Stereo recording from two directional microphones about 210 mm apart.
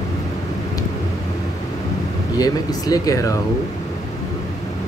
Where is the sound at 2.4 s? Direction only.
15° left (ahead or behind).